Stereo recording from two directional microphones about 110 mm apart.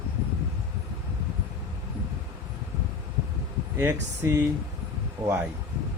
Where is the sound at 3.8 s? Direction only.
20° right (ahead or behind).